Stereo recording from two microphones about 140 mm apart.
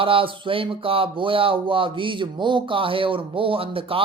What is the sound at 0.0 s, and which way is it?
Speech, 40° right (ahead or behind).